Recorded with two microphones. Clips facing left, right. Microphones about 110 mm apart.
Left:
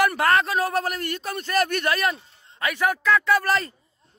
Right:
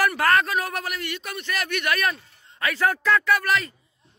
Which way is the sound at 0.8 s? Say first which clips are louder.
Left 3 dB; 45° left (ahead or behind).